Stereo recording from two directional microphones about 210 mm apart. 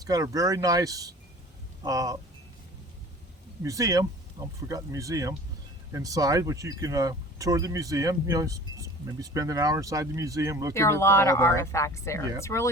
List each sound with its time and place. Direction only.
0.0 s speech: 15° right (ahead or behind)
3.6 s speech: 15° right (ahead or behind)
10.8 s speech: 15° left (ahead or behind)